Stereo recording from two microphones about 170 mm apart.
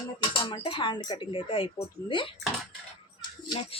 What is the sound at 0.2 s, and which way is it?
Speech, 25° left (ahead or behind).